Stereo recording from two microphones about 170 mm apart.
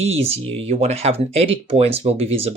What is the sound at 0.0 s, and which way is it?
Speech, 35° right (ahead or behind).